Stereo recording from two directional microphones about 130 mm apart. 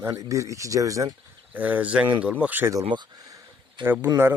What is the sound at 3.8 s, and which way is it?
Speech, 40° right (ahead or behind).